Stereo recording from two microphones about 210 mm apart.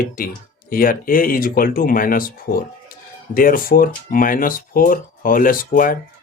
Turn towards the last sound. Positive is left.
turn(degrees=40)  # may be behind; listen again after turning